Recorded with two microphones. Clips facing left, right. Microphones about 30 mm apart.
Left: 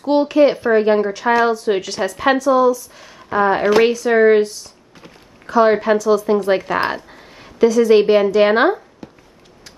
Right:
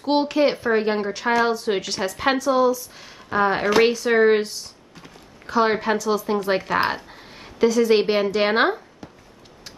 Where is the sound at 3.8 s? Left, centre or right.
Right.